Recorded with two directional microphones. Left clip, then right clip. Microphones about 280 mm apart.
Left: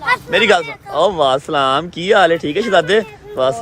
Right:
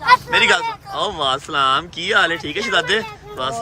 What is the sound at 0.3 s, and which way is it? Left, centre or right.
Speech, centre.